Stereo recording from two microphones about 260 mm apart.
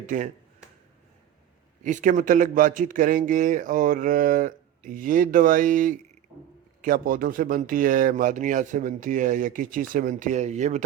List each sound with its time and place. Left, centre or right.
0.0 s speech: right
1.8 s speech: right